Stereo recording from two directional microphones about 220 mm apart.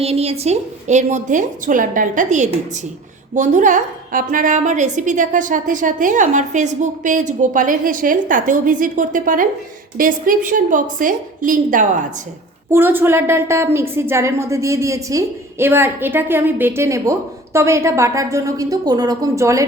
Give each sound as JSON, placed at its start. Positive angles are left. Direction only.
{"t": 0.0, "sound": "a woman's voice", "side_deg": -25}
{"t": 12.7, "sound": "a woman's voice", "side_deg": -10}